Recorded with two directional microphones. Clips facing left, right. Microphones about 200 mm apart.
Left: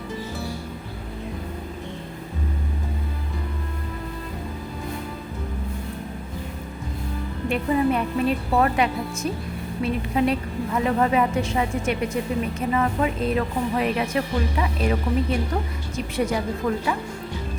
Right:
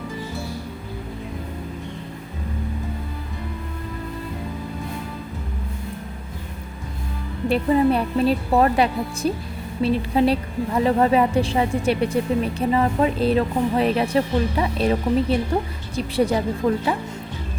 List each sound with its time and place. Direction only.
7.4 s speech: 35° right (ahead or behind)